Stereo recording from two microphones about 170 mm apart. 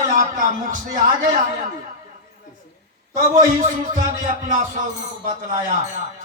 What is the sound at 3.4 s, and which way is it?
Speech, 50° right (ahead or behind).